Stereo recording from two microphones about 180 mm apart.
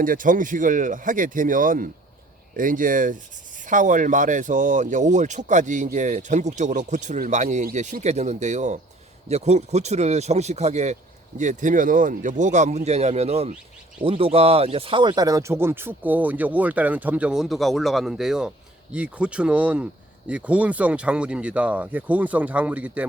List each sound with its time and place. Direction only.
0.0 s speech: 50° right (ahead or behind); by 23.0 s 10° right (ahead or behind)